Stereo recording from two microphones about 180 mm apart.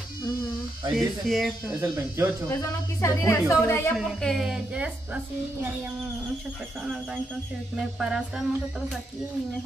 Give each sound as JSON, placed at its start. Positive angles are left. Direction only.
{"t": 0.9, "sound": "a woman's voice", "side_deg": 0}
{"t": 1.8, "sound": "speech", "side_deg": -15}
{"t": 3.0, "sound": "a woman's voice", "side_deg": 15}
{"t": 4.0, "sound": "a woman's voice", "side_deg": 0}
{"t": 8.0, "sound": "a woman's voice", "side_deg": -5}